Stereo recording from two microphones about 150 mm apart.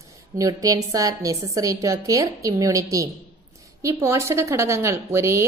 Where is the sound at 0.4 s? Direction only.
25° right (ahead or behind).